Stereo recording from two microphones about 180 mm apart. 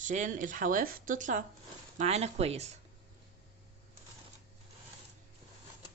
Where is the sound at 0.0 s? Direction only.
45° right (ahead or behind).